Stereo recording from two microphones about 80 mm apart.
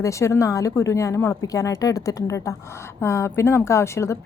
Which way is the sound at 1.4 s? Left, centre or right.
Left.